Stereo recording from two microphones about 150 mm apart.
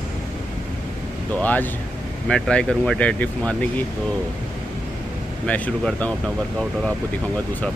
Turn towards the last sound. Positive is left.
turn(degrees=10)  # may be behind; listen again after turning